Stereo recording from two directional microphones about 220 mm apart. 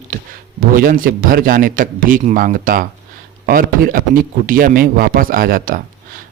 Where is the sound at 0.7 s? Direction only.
40° right (ahead or behind).